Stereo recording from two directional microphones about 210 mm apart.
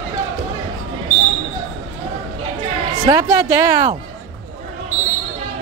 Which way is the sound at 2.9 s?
15° right (ahead or behind).